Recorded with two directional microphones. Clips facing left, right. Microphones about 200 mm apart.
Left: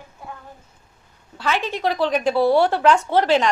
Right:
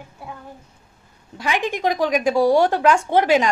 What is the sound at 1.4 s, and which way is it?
A woman's voice, 15° right (ahead or behind).